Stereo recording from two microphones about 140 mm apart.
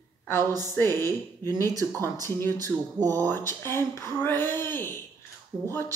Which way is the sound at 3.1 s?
15° left (ahead or behind).